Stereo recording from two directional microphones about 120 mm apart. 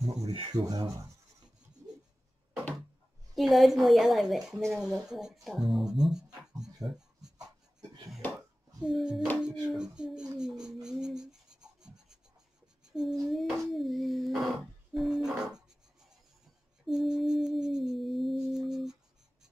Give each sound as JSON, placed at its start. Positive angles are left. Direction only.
{"t": 0.5, "sound": "speech", "side_deg": -35}
{"t": 3.3, "sound": "child singing", "side_deg": 0}
{"t": 4.7, "sound": "speech", "side_deg": -5}
{"t": 8.8, "sound": "speech", "side_deg": -5}
{"t": 12.9, "sound": "child singing", "side_deg": -5}
{"t": 16.8, "sound": "child singing", "side_deg": 0}